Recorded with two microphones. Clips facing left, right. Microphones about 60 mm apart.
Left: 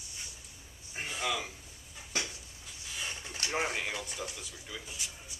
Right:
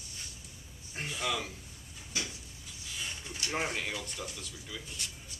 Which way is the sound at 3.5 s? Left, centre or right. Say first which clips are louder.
Left 1 dB; centre.